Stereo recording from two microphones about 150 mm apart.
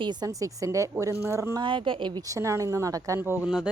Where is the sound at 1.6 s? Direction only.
35° right (ahead or behind).